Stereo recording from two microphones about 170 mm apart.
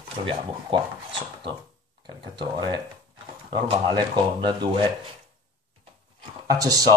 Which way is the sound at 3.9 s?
25° right (ahead or behind).